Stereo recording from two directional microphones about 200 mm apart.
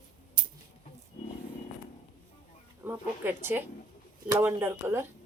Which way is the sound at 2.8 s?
10° right (ahead or behind).